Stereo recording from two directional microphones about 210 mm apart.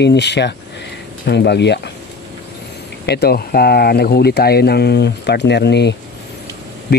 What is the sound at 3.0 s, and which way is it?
Speech, 50° left (ahead or behind).